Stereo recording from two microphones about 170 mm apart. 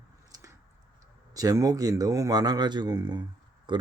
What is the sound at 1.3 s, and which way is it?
Speech, 20° right (ahead or behind).